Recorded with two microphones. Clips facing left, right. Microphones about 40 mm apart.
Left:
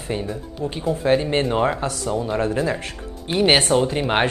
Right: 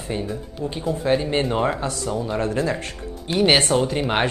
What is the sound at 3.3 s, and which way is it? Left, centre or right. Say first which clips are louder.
Speech: even; left.